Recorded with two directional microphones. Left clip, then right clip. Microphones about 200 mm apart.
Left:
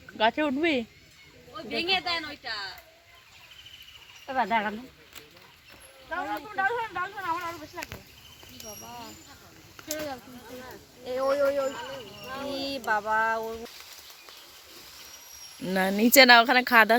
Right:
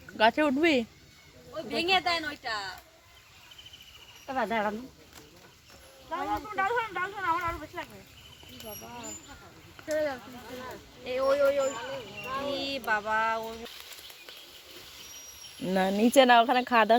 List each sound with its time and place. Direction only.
0.2 s speech: 5° right (ahead or behind)
1.7 s a woman's voice: 35° right (ahead or behind)
4.3 s speech: 55° left (ahead or behind)
6.1 s speech: 20° left (ahead or behind)
6.6 s speech: 5° left (ahead or behind)
9.8 s a sound: centre (ahead or behind)
11.0 s speech: 40° left (ahead or behind)
15.6 s speech: 5° left (ahead or behind)